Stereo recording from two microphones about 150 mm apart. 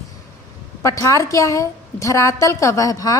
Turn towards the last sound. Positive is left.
turn(degrees=25)  # may be behind; listen again after turning